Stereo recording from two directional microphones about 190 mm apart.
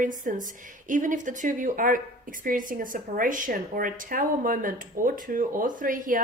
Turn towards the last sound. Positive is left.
turn(degrees=-45)  # may be behind; listen again after turning